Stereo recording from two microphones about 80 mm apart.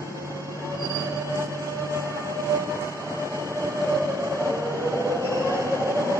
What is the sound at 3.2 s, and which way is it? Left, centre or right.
Train, right.